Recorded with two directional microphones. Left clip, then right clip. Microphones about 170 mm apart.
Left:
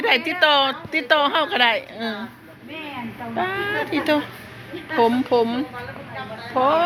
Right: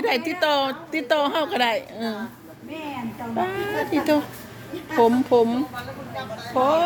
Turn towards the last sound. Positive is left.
turn(degrees=-10)  # may be behind; listen again after turning